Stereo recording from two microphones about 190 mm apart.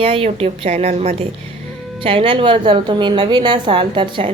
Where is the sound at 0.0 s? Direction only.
30° right (ahead or behind).